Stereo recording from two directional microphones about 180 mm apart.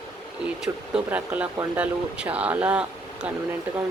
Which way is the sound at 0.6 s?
5° right (ahead or behind).